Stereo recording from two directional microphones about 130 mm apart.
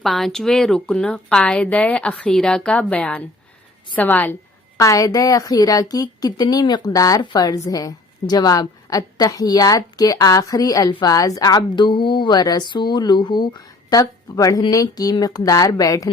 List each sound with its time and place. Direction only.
0.0 s speech: centre (ahead or behind)
4.8 s a woman's voice: 25° left (ahead or behind)